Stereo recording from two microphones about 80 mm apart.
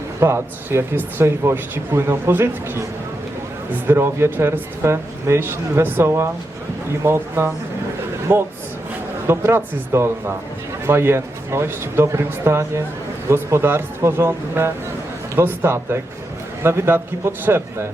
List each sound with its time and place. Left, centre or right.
0.2 s a man's voice: right